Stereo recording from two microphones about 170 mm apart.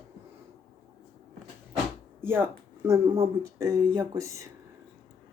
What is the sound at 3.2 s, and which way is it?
Speech, 20° right (ahead or behind).